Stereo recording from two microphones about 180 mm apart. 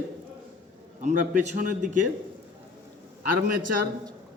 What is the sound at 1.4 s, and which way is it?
Speech, 45° right (ahead or behind).